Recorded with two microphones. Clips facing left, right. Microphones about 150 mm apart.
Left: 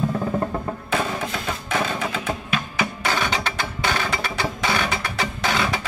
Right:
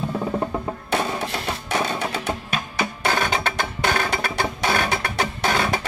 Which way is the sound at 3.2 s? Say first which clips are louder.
Right 2 dB; 55° right (ahead or behind).